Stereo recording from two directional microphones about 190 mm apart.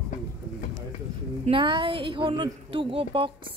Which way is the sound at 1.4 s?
25° right (ahead or behind).